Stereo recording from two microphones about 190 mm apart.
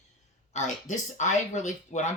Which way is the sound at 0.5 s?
40° left (ahead or behind).